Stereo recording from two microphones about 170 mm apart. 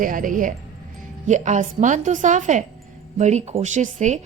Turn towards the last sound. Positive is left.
turn(degrees=-45)  # may be behind; listen again after turning